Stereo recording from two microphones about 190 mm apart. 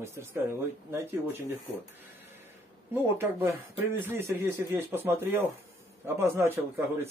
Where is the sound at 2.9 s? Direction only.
10° right (ahead or behind).